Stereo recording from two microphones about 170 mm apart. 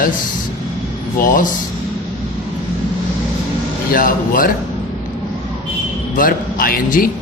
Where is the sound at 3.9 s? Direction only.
55° left (ahead or behind).